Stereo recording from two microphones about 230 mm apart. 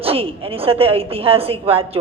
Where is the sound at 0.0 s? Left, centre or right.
Right.